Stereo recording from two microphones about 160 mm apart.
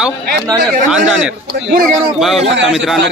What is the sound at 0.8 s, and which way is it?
Speech, 5° right (ahead or behind).